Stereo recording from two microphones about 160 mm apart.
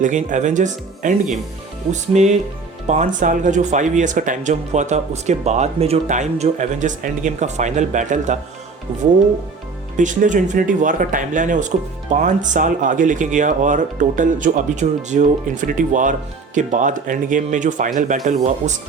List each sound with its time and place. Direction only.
0.0 s speech: 50° right (ahead or behind)
10.0 s speech: 50° right (ahead or behind)